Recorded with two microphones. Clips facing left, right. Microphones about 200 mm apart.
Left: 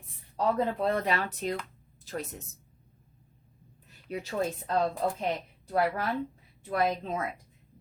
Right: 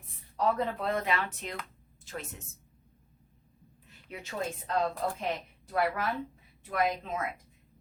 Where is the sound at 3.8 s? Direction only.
35° left (ahead or behind).